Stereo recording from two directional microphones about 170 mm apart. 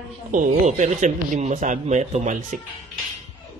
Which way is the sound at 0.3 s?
45° right (ahead or behind).